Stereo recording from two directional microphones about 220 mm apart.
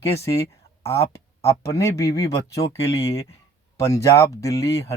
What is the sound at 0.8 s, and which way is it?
Speech, 15° left (ahead or behind).